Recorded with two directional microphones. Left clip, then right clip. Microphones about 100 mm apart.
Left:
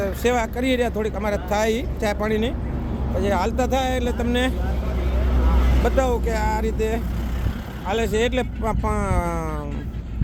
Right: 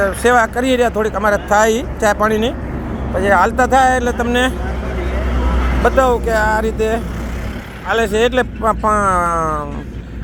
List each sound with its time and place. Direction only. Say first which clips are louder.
0.0 s speech: right 9 dB; 5° left (ahead or behind)
5.8 s speech: right 9 dB; 15° left (ahead or behind)